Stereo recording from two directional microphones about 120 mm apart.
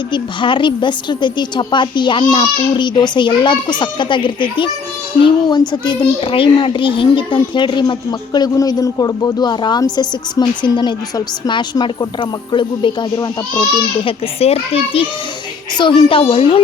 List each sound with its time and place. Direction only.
0.1 s a child's voice: 40° left (ahead or behind)
14.0 s a child's voice: 55° left (ahead or behind)